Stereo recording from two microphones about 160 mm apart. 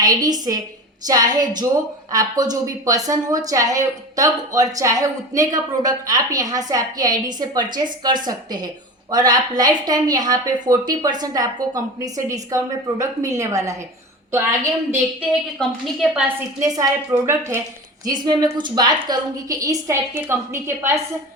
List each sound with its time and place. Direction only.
0.0 s a woman's voice: 25° right (ahead or behind)
15.3 s a woman's voice: centre (ahead or behind)
16.6 s a woman's voice: 20° right (ahead or behind)